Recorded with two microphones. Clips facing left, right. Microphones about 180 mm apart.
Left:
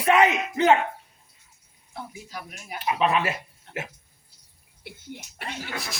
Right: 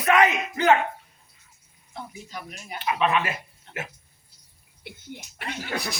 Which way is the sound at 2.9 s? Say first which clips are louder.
Left 1 dB; 35° left (ahead or behind).